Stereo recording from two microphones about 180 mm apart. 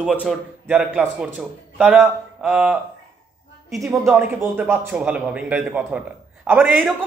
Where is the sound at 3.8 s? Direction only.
15° right (ahead or behind).